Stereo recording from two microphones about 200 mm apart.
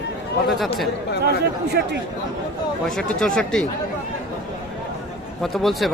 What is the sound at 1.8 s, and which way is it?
Speech, 55° right (ahead or behind).